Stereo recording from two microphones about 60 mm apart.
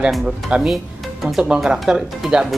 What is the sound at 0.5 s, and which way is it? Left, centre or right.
Speech, centre.